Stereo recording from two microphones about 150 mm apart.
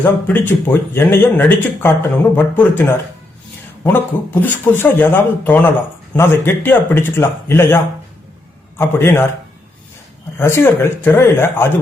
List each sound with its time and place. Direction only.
0.0 s speech: 15° left (ahead or behind)
8.8 s speech: 15° left (ahead or behind)
10.3 s speech: 15° left (ahead or behind)